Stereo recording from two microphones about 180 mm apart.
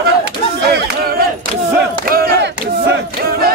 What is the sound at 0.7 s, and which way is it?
Battle cry, 60° right (ahead or behind).